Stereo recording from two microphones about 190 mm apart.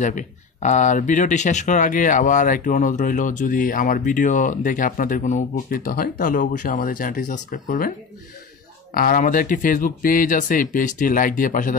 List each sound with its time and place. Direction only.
0.0 s speech: 40° left (ahead or behind)
8.9 s speech: 45° left (ahead or behind)